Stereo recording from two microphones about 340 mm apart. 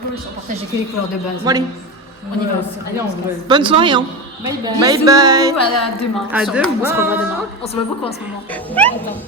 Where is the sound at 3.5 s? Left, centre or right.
Centre.